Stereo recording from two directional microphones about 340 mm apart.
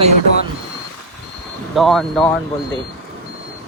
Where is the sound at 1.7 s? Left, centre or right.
Centre.